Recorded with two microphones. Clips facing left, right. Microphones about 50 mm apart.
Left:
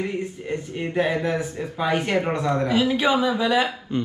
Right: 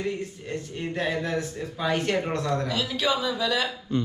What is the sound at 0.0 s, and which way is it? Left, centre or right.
Speech, centre.